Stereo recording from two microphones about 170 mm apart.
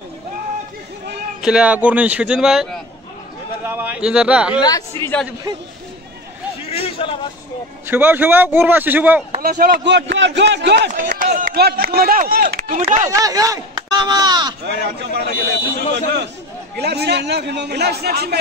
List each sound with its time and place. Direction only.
1.4 s a man's voice: 5° right (ahead or behind)
4.6 s speech: 25° left (ahead or behind)
6.6 s a sound: 35° left (ahead or behind)
7.9 s speech: 10° right (ahead or behind)
9.4 s a man's voice: 60° right (ahead or behind); by 11.1 s 90° right
11.1 s speech: 55° right (ahead or behind)
13.1 s speech: 20° right (ahead or behind)
14.6 s a man's voice: 80° right